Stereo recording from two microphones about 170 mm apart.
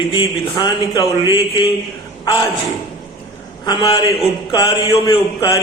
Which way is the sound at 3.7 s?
25° left (ahead or behind).